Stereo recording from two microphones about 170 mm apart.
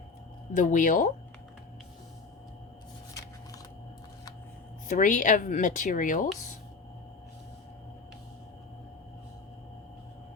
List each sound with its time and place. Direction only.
0.5 s speech: 50° left (ahead or behind)
4.9 s speech: 45° left (ahead or behind)